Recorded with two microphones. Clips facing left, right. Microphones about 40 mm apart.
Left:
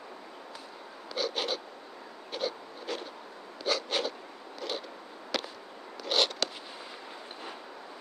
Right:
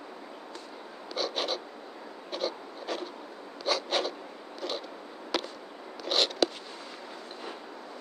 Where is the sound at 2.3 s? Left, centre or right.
Centre.